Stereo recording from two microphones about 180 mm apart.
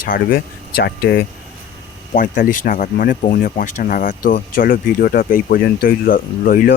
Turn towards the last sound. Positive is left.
turn(degrees=50)  # may be behind; listen again after turning